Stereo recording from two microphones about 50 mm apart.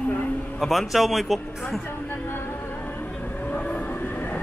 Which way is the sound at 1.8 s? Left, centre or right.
Left.